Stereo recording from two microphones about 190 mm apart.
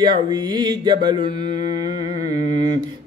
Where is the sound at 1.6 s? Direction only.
35° left (ahead or behind).